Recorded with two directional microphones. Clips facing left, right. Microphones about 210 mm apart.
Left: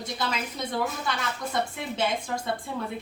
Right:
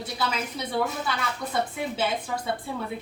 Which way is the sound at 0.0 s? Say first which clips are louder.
Right 1 dB; 5° right (ahead or behind).